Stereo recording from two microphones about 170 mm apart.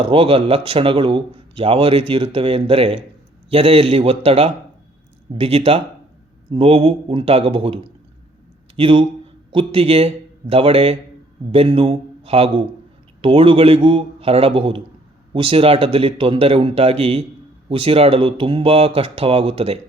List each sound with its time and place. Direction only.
0.0 s a man's voice: 30° right (ahead or behind)